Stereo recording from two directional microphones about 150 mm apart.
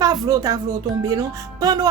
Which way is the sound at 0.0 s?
25° right (ahead or behind).